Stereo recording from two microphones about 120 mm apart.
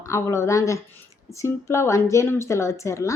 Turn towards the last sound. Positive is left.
turn(degrees=25)  # may be behind; listen again after turning